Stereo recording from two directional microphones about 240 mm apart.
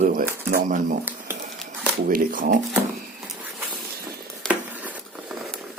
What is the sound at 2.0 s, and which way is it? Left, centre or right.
Speech, right.